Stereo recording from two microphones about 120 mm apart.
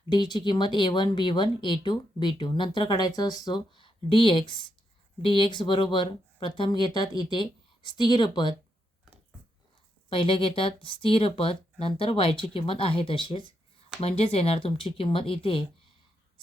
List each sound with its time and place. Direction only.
0.1 s a woman's voice: 40° left (ahead or behind)
10.1 s a woman's voice: 45° left (ahead or behind)
14.2 s a woman's voice: 55° left (ahead or behind)